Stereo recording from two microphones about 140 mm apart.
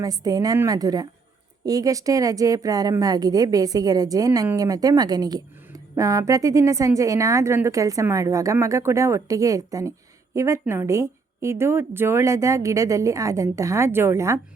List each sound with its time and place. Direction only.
0.0 s a woman's voice: 25° right (ahead or behind)